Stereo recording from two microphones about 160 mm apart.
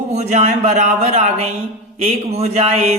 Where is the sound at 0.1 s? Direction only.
45° right (ahead or behind).